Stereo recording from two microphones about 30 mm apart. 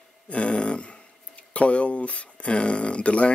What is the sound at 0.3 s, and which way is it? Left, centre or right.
Speech, left.